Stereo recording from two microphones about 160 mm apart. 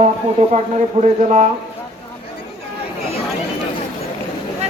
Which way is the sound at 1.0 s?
45° right (ahead or behind).